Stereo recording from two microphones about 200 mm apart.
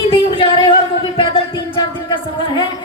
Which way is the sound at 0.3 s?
25° left (ahead or behind).